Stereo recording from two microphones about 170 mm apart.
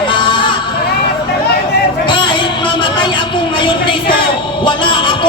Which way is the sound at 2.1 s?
30° left (ahead or behind).